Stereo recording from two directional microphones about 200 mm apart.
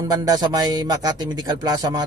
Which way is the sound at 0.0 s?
20° right (ahead or behind).